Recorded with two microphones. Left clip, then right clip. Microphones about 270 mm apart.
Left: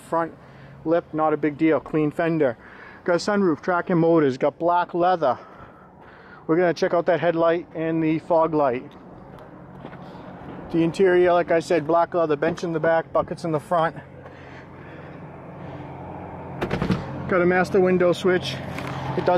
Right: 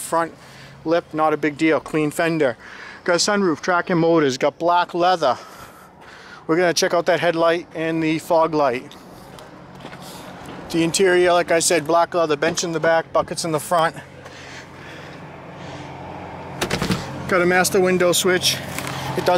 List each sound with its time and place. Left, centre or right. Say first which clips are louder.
0.1 s speech: right 3 dB; centre
0.8 s speech: right 2 dB; centre
6.6 s speech: right 3 dB; centre
10.5 s speech: right 2 dB; centre
15.6 s vehicle: right 3 dB; centre
17.1 s speech: right 3 dB; centre